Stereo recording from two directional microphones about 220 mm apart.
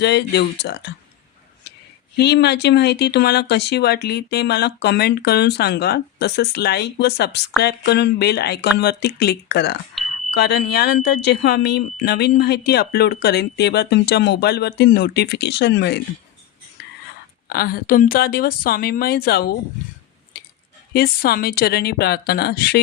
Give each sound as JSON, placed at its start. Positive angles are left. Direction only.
{"t": 0.0, "sound": "speech", "side_deg": 50}
{"t": 2.1, "sound": "speech", "side_deg": 50}
{"t": 10.0, "sound": "a sound", "side_deg": 0}
{"t": 10.3, "sound": "speech", "side_deg": 50}
{"t": 17.5, "sound": "speech", "side_deg": 45}
{"t": 20.9, "sound": "speech", "side_deg": 45}